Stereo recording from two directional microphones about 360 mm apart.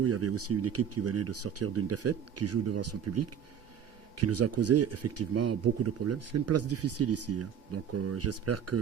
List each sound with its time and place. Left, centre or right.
0.0 s speech: right